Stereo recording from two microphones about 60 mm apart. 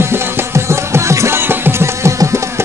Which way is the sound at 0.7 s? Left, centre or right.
Right.